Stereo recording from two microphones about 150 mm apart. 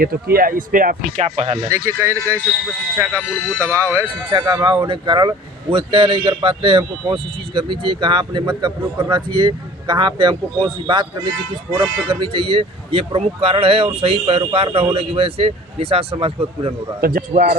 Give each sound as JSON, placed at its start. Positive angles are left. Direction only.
{"t": 0.0, "sound": "speech", "side_deg": -90}
{"t": 1.6, "sound": "speech", "side_deg": -20}
{"t": 3.2, "sound": "speech", "side_deg": 15}
{"t": 4.0, "sound": "speech", "side_deg": -30}
{"t": 17.0, "sound": "speech", "side_deg": -75}